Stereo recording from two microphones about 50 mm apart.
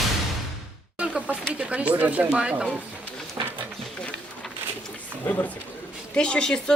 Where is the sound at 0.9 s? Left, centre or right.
Right.